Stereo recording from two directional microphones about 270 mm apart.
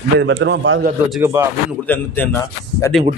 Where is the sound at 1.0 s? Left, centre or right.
Centre.